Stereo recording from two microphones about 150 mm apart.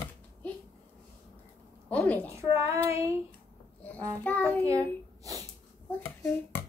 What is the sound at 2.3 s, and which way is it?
Speech, 20° right (ahead or behind).